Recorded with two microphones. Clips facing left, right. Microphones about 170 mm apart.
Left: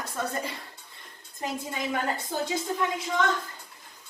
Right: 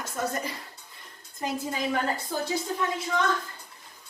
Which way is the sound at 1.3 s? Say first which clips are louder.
Right 2 dB; 20° left (ahead or behind).